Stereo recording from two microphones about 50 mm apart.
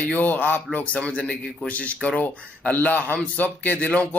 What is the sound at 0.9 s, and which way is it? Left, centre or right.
Speech, left.